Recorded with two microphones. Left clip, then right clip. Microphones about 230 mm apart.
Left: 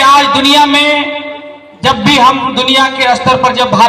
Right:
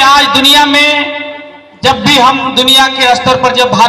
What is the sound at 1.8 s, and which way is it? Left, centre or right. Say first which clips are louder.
A man's voice: right 1 dB; right.